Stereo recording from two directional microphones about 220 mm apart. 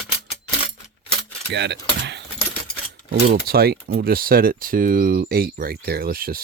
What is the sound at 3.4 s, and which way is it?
Speech, 45° right (ahead or behind).